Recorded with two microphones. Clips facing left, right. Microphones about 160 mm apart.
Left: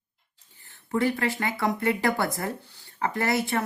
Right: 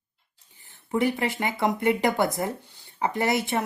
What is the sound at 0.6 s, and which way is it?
Speech, 15° right (ahead or behind).